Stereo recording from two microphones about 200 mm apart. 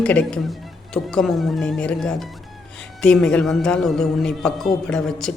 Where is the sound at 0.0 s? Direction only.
5° left (ahead or behind).